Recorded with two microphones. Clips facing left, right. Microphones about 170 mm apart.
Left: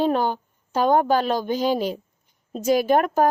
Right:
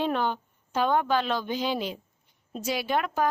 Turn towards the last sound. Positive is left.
turn(degrees=45)  # may be behind; listen again after turning